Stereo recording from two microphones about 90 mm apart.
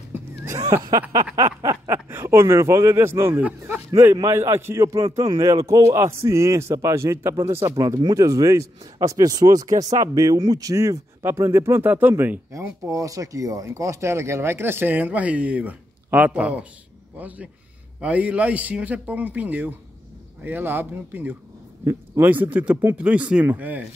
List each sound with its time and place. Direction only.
0.1 s neigh: 35° right (ahead or behind)
1.1 s a man's voice: 40° right (ahead or behind)
2.0 s a man's voice: 25° right (ahead or behind)
7.6 s a man's voice: 40° right (ahead or behind)
11.2 s speech: 30° right (ahead or behind)
12.8 s speech: 35° right (ahead or behind); by 16.6 s 15° right (ahead or behind)
18.0 s a man's voice: 15° right (ahead or behind)